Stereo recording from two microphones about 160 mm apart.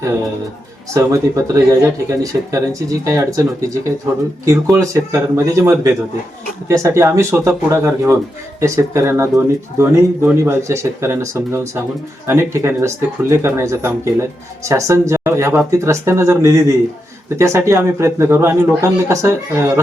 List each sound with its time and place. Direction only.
0.9 s speech: 20° right (ahead or behind)